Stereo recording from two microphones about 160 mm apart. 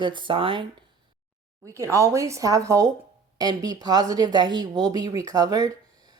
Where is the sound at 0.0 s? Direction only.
30° right (ahead or behind).